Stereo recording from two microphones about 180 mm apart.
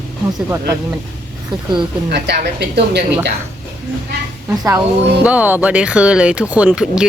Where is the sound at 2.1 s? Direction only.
65° right (ahead or behind).